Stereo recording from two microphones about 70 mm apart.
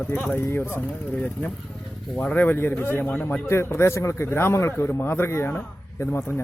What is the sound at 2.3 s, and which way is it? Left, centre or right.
A man's voice, left.